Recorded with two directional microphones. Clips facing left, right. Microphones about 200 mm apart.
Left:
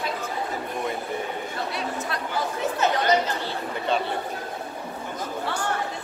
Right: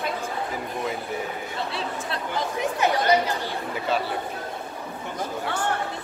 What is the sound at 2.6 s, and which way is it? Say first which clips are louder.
Speech: right 1 dB; 15° right (ahead or behind).